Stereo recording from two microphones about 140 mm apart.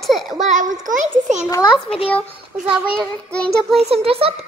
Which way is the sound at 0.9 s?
60° right (ahead or behind).